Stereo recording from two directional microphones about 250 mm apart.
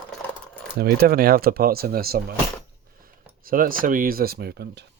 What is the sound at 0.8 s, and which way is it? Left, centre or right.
Speech, right.